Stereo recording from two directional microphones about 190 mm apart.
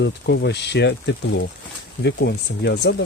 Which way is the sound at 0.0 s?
65° left (ahead or behind).